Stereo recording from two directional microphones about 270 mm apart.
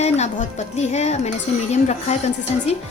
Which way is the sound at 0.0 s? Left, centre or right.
Left.